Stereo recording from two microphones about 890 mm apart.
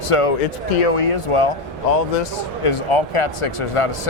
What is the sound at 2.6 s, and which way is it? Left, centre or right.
Speech, left.